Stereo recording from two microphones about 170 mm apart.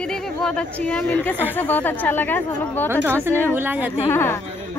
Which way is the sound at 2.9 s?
15° right (ahead or behind).